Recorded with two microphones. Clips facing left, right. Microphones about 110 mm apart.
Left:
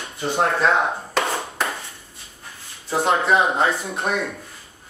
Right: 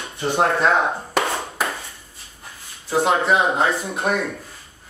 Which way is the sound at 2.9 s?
Centre (ahead or behind).